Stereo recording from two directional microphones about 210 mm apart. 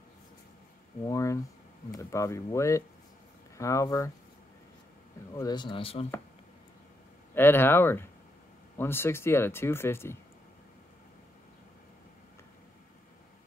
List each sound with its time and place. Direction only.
1.0 s speech: 15° left (ahead or behind)
5.3 s speech: 20° left (ahead or behind)
7.3 s speech: 10° left (ahead or behind)